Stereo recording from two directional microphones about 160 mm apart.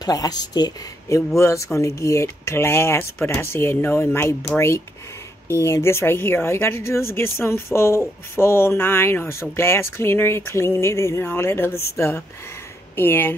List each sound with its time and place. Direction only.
0.0 s speech: 25° left (ahead or behind)